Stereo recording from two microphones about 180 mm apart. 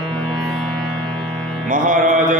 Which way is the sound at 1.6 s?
50° right (ahead or behind).